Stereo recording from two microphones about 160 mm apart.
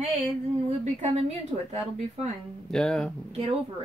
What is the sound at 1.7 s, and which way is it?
Speech, 45° right (ahead or behind).